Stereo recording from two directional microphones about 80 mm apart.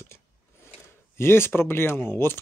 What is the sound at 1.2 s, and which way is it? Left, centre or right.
Speech, left.